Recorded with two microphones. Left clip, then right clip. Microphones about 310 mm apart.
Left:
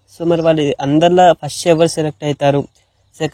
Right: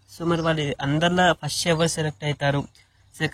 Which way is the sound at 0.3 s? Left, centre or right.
Left.